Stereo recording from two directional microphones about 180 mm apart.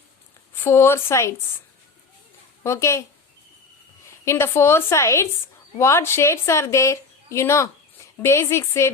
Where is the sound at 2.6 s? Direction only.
15° left (ahead or behind).